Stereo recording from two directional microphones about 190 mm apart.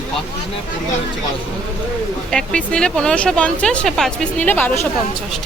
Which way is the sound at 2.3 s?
5° left (ahead or behind).